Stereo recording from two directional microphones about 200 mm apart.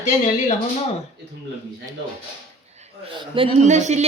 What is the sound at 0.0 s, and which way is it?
Speech, 35° left (ahead or behind).